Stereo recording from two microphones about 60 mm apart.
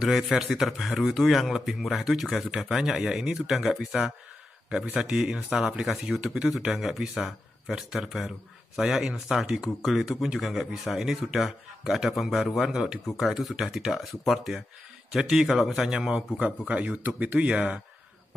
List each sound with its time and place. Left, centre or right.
0.0 s speech: centre
4.9 s speech: centre
16.3 s speech: centre